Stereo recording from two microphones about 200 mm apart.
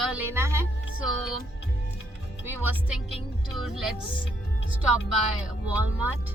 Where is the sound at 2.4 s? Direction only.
10° right (ahead or behind).